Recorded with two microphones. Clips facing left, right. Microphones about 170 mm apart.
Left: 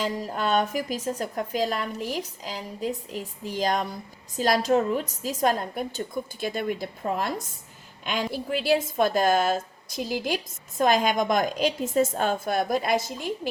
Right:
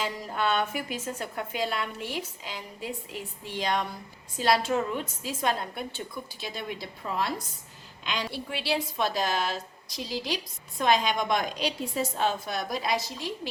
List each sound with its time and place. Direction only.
0.0 s a woman's voice: 40° left (ahead or behind)